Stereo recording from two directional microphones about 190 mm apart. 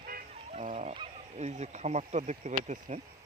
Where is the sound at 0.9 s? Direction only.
35° right (ahead or behind).